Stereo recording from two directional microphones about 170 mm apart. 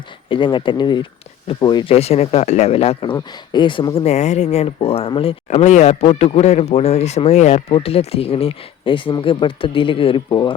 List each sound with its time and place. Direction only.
0.3 s speech: 30° left (ahead or behind)